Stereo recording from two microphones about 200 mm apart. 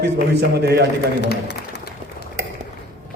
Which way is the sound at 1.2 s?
55° left (ahead or behind).